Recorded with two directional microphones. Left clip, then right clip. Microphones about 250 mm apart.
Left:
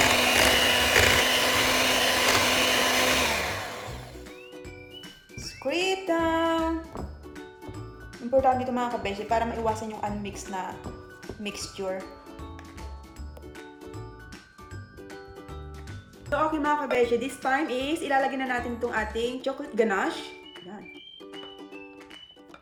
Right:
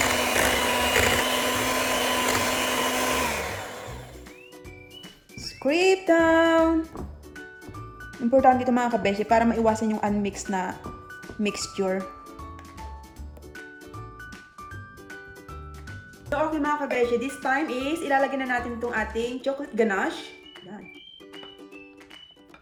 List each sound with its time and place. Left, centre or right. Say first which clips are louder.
0.0 s vacuum cleaner: left 2 dB; centre
5.4 s music: right 5 dB; right
8.4 s speech: right 4 dB; right
16.3 s a woman's voice: even; centre